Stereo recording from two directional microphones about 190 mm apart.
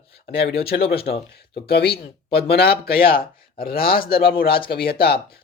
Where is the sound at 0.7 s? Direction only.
55° left (ahead or behind).